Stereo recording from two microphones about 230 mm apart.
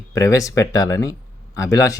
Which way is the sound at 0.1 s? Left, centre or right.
Centre.